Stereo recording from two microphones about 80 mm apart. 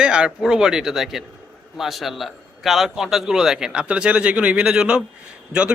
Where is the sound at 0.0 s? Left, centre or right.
Centre.